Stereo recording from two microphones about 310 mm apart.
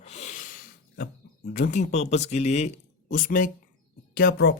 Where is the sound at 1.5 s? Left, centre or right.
Left.